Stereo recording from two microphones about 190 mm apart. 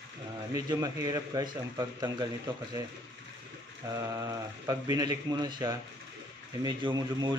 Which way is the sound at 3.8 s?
15° right (ahead or behind).